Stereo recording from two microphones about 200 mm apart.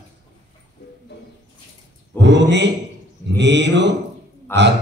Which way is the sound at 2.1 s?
60° right (ahead or behind).